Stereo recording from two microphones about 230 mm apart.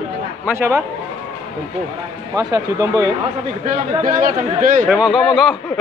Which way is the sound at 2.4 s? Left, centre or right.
Centre.